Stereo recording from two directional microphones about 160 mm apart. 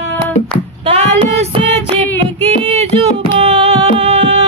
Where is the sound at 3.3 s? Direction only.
35° right (ahead or behind).